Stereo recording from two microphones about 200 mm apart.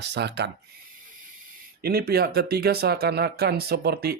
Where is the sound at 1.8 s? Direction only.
50° right (ahead or behind).